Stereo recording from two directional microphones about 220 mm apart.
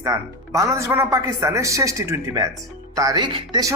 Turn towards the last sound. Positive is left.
turn(degrees=-20)  # may be behind; listen again after turning